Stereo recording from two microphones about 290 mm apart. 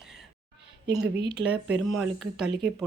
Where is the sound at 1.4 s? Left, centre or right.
Centre.